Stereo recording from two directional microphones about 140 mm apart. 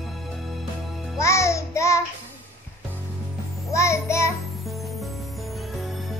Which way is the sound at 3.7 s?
20° left (ahead or behind).